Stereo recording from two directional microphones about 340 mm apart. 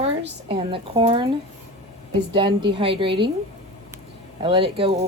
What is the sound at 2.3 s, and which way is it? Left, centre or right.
Speech, centre.